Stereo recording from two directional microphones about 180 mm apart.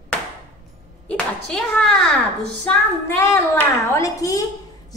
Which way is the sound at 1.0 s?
5° left (ahead or behind).